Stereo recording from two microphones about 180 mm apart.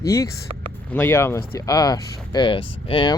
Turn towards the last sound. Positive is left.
turn(degrees=30)  # may be behind; listen again after turning